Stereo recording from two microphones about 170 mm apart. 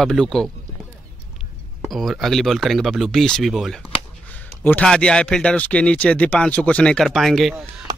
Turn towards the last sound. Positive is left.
turn(degrees=0)  # may be behind; listen again after turning